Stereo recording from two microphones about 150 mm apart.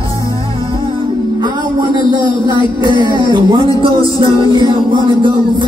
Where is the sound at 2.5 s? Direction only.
30° right (ahead or behind).